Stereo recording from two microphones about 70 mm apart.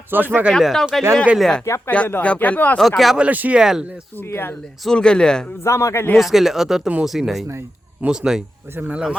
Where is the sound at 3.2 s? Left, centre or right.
Right.